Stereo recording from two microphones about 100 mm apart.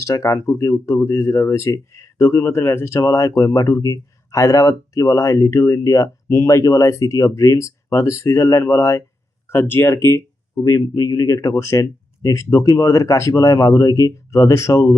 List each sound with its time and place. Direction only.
0.0 s speech: 30° left (ahead or behind)